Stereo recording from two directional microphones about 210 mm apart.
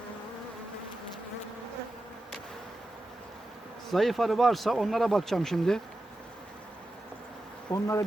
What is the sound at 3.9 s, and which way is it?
Speech, centre (ahead or behind).